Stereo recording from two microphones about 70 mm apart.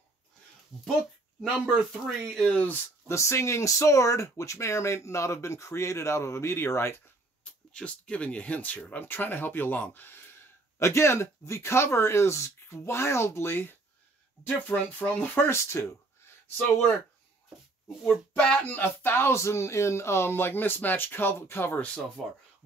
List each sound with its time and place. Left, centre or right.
0.7 s speech: centre
1.4 s speech: centre
2.5 s speech: left
3.1 s speech: left
7.7 s speech: centre; by 10.2 s left
10.8 s speech: left
18.6 s speech: left
21.7 s speech: centre